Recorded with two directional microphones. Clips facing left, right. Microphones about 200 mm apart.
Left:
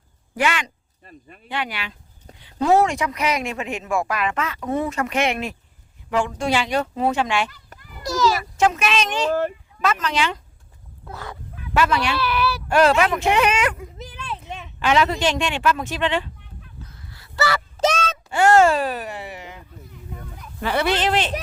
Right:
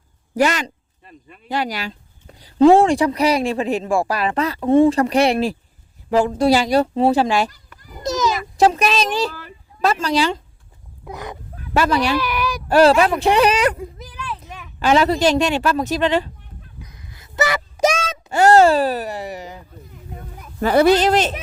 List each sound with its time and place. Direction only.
0.3 s speech: 40° right (ahead or behind)
7.8 s children playing: 40° right (ahead or behind)
8.0 s a sound: 20° right (ahead or behind)
8.5 s speech: 35° right (ahead or behind)
11.0 s speech: 15° right (ahead or behind)
11.5 s speech: 40° right (ahead or behind)
12.1 s speech: 15° right (ahead or behind)
12.6 s speech: 35° right (ahead or behind)
14.0 s a sound: 25° left (ahead or behind)
14.8 s speech: 35° right (ahead or behind)
16.8 s a sound: 15° right (ahead or behind)
18.3 s speech: 40° right (ahead or behind)